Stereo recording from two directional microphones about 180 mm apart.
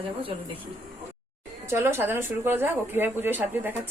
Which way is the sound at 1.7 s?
15° right (ahead or behind).